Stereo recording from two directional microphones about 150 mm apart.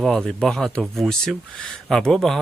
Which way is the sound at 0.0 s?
5° left (ahead or behind).